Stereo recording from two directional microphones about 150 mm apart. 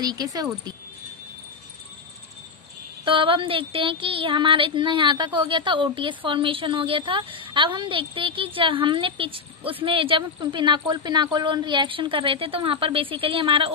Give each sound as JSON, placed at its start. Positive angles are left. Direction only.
{"t": 0.0, "sound": "speech", "side_deg": -25}
{"t": 3.1, "sound": "speech", "side_deg": -35}